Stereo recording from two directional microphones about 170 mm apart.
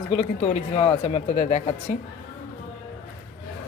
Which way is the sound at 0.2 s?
30° left (ahead or behind).